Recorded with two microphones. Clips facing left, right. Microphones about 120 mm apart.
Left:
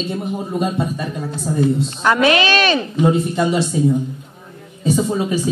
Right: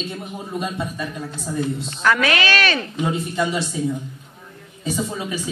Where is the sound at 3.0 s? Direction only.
35° left (ahead or behind).